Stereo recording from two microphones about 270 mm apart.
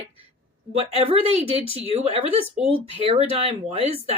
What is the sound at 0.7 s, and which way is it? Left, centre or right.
Speech, right.